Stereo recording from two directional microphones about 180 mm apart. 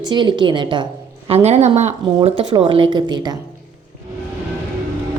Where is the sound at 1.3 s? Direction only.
35° right (ahead or behind).